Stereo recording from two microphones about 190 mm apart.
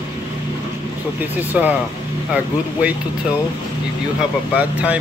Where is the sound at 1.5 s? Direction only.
10° right (ahead or behind).